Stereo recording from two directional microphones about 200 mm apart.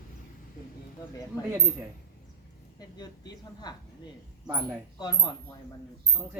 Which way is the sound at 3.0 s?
20° left (ahead or behind).